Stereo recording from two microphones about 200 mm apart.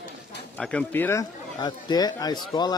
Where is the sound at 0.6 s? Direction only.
5° left (ahead or behind).